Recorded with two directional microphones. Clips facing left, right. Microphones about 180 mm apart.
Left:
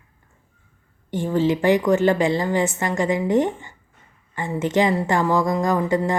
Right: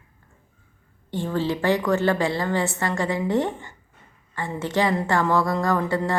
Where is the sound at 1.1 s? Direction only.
15° left (ahead or behind).